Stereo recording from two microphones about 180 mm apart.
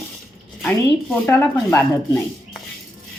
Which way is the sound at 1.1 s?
15° left (ahead or behind).